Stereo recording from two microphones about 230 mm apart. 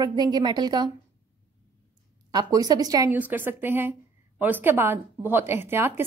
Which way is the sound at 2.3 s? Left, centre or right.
Centre.